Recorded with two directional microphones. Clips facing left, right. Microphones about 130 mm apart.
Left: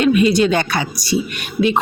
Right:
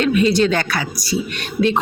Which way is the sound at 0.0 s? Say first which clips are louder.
Left 2 dB; 15° left (ahead or behind).